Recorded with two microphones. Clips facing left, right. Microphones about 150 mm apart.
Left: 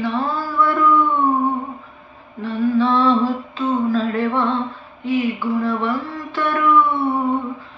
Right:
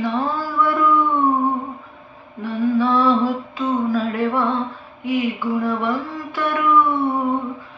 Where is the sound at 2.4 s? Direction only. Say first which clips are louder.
Left 1 dB; 10° right (ahead or behind).